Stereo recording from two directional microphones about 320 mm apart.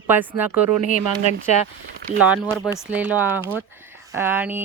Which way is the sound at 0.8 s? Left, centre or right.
Left.